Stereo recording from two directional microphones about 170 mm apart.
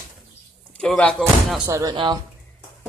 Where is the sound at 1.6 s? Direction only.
20° right (ahead or behind).